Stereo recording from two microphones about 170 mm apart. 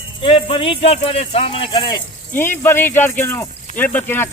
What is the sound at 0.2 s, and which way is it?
Music, 35° left (ahead or behind).